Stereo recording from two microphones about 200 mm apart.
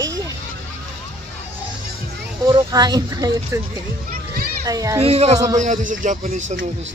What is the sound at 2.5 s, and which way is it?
Speech, 20° right (ahead or behind).